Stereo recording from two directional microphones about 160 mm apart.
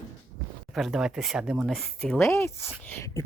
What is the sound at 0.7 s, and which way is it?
Speech, 5° right (ahead or behind).